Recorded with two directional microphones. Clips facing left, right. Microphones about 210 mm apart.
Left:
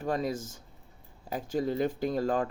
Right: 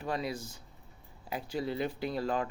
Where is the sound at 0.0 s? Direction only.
45° left (ahead or behind).